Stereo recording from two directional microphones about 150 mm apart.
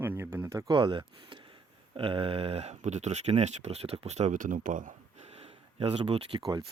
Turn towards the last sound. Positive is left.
turn(degrees=-30)  # may be behind; listen again after turning